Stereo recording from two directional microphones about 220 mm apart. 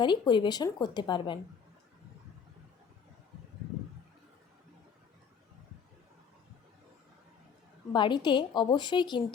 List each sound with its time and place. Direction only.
0.0 s speech: 20° left (ahead or behind)
7.9 s speech: 20° left (ahead or behind)